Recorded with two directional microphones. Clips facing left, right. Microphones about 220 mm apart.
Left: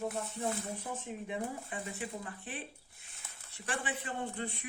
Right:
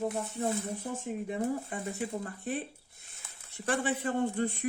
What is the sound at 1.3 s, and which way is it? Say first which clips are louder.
Speech: right 7 dB; 45° right (ahead or behind).